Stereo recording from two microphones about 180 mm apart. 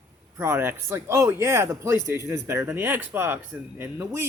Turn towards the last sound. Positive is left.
turn(degrees=-10)  # may be behind; listen again after turning